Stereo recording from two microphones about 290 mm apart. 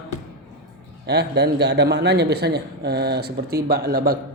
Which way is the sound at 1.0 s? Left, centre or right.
Right.